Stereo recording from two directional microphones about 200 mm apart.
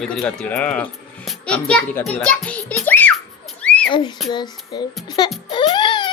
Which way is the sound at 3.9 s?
25° left (ahead or behind).